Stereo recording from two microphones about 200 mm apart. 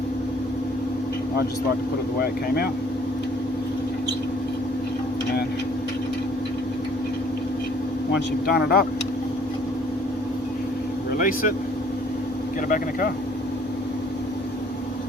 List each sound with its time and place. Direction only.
2.1 s speech: 50° left (ahead or behind)
8.4 s speech: 50° left (ahead or behind)
11.2 s speech: 45° left (ahead or behind)
12.6 s speech: 40° left (ahead or behind)